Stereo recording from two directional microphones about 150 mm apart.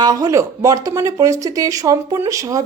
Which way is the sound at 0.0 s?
25° right (ahead or behind).